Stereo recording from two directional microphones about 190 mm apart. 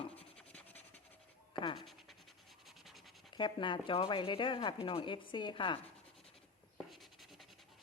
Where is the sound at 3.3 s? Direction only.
25° left (ahead or behind).